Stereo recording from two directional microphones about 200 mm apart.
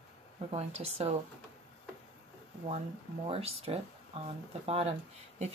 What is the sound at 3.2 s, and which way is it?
Speech, 30° right (ahead or behind).